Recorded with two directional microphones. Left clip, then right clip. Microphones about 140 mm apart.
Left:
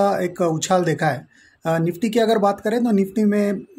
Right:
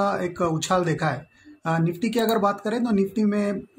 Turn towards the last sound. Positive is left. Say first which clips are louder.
# left 4 dB
turn(degrees=35)  # may be behind; listen again after turning